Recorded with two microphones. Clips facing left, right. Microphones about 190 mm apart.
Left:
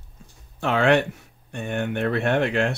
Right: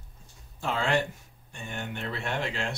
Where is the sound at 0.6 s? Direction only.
70° left (ahead or behind).